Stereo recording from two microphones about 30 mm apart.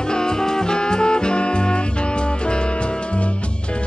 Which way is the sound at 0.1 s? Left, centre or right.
Left.